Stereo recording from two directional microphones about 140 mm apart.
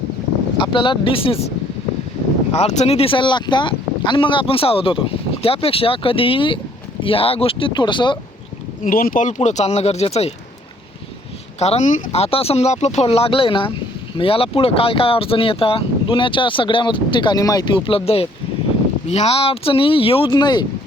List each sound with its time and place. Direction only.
0.6 s speech: 35° left (ahead or behind)
8.8 s speech: 80° left; by 10.3 s 50° left (ahead or behind)
11.6 s speech: 55° left (ahead or behind); by 20.7 s 30° left (ahead or behind)